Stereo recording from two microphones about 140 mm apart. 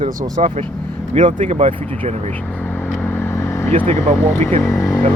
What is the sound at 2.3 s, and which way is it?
Vehicle, 10° left (ahead or behind).